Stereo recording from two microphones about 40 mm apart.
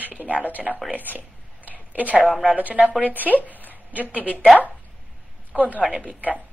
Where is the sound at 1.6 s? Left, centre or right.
Left.